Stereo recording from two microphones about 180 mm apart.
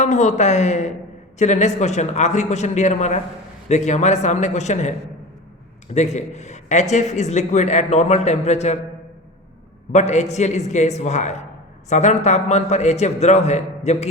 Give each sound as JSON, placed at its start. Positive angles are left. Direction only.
{"t": 0.0, "sound": "a man's voice", "side_deg": 40}
{"t": 9.9, "sound": "a man's voice", "side_deg": 40}